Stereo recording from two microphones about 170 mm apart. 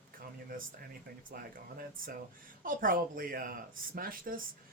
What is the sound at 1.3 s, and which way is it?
Speech, 60° right (ahead or behind).